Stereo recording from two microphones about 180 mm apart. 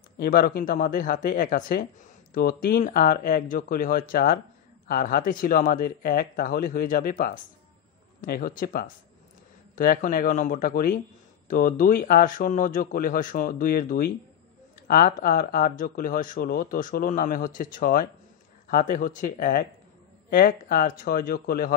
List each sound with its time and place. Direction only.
0.2 s speech: 55° left (ahead or behind)